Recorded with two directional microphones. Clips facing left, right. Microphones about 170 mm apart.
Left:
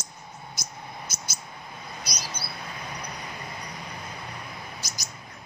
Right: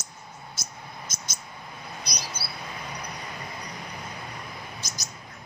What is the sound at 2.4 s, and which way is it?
Mouse, 10° right (ahead or behind).